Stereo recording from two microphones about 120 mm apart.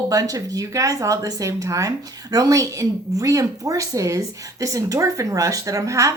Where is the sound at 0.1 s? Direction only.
30° right (ahead or behind).